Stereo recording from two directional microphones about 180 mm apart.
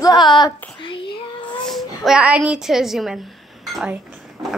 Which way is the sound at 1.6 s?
Centre (ahead or behind).